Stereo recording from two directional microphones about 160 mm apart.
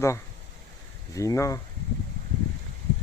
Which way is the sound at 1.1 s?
20° left (ahead or behind).